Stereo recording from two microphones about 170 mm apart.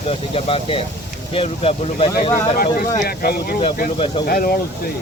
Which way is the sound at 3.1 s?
60° left (ahead or behind).